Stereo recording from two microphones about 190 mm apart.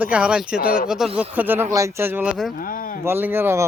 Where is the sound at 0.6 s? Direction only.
50° left (ahead or behind).